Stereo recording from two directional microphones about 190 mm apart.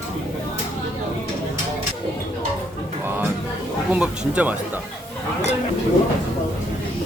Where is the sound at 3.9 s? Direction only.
5° right (ahead or behind).